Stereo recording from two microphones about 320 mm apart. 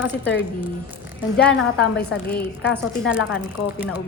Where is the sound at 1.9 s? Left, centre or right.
Left.